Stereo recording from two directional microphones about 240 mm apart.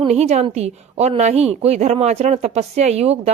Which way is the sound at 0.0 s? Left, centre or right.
Right.